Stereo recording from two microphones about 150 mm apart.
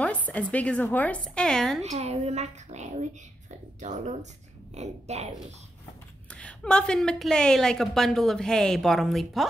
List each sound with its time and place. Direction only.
0.3 s a woman's voice: 10° left (ahead or behind)
1.8 s a woman's voice: 45° right (ahead or behind)
6.3 s a woman's voice: 5° left (ahead or behind)